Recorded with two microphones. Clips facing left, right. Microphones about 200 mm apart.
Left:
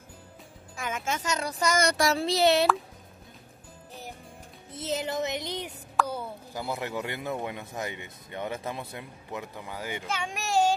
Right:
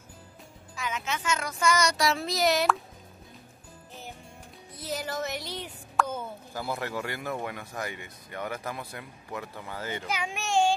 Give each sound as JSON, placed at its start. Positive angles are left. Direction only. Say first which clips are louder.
{"t": 0.7, "sound": "speech", "louder": "left 1 dB", "side_deg": 50}
{"t": 1.8, "sound": "child singing", "louder": "left 2 dB", "side_deg": 50}
{"t": 2.1, "sound": "speech", "louder": "left 3 dB", "side_deg": 30}
{"t": 4.7, "sound": "speech", "louder": "left 3 dB", "side_deg": 20}
{"t": 6.0, "sound": "plop", "louder": "even", "side_deg": 0}
{"t": 6.5, "sound": "speech", "louder": "even", "side_deg": 20}
{"t": 10.2, "sound": "speech", "louder": "even", "side_deg": 0}